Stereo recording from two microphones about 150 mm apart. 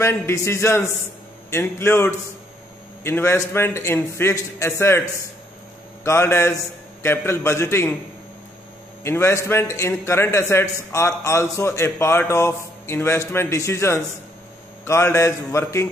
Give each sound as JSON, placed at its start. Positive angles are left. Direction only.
{"t": 0.0, "sound": "a man's voice", "side_deg": 20}
{"t": 6.0, "sound": "a man's voice", "side_deg": 15}
{"t": 9.0, "sound": "a man's voice", "side_deg": 15}
{"t": 14.9, "sound": "mantra", "side_deg": 20}